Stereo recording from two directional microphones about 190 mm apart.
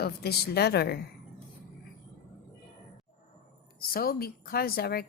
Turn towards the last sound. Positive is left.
turn(degrees=55)  # may be behind; listen again after turning